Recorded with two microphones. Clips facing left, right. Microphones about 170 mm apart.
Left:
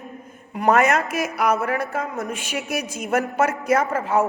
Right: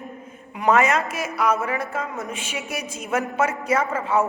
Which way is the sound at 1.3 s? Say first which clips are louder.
Even; 40° left (ahead or behind).